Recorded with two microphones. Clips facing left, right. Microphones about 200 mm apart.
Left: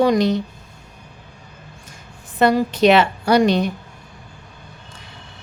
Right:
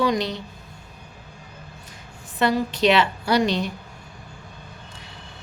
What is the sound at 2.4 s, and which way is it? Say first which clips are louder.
A woman's voice: left 5 dB; 50° left (ahead or behind).